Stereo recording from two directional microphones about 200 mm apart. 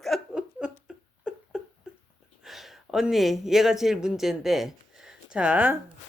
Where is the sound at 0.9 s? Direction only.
5° right (ahead or behind).